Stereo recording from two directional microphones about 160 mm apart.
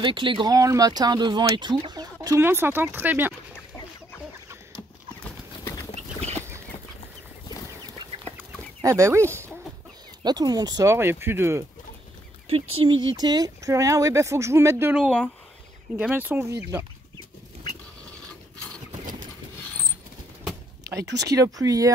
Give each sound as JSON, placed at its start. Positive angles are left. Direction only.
{"t": 0.0, "sound": "speech", "side_deg": -30}
{"t": 8.8, "sound": "speech", "side_deg": -20}
{"t": 12.4, "sound": "speech", "side_deg": -35}
{"t": 15.0, "sound": "speech", "side_deg": 5}
{"t": 16.0, "sound": "speech", "side_deg": -10}
{"t": 20.8, "sound": "a sound", "side_deg": -20}
{"t": 21.3, "sound": "speech", "side_deg": -20}